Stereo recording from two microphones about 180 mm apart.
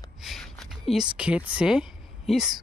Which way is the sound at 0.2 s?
Centre (ahead or behind).